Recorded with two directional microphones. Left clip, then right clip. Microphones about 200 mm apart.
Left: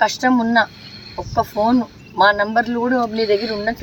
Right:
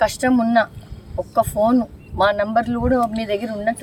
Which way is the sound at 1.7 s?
25° right (ahead or behind).